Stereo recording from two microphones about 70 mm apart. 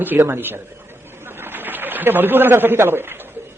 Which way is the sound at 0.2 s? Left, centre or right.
Right.